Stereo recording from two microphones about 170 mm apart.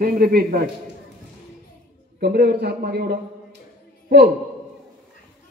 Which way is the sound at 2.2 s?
70° right (ahead or behind).